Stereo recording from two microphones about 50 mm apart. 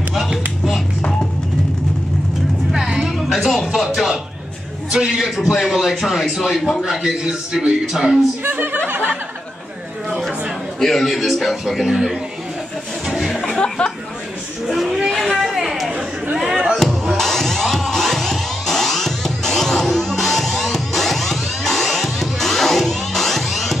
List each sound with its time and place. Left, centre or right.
0.1 s a sound: centre
2.7 s music: centre
4.9 s speech: centre
8.5 s speech: right
10.0 s a sound: centre
10.8 s a man's voice: centre
13.0 s a sound: centre
13.3 s music: centre
13.6 s a sound: centre
14.7 s a man's voice: centre
15.0 s speech: centre
15.4 s chatter: centre
16.7 s music: centre